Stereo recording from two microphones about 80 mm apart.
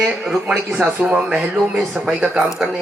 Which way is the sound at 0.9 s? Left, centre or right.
Centre.